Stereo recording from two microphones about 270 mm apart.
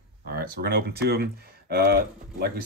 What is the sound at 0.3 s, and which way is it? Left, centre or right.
Speech, right.